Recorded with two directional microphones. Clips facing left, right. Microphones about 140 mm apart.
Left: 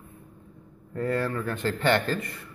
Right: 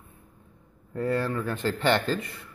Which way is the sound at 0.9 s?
15° right (ahead or behind).